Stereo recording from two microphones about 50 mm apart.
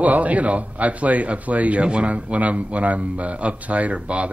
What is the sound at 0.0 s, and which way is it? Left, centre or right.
A man's voice, right.